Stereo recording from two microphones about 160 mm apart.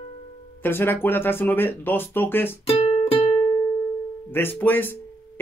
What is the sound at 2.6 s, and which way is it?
Music, 35° left (ahead or behind).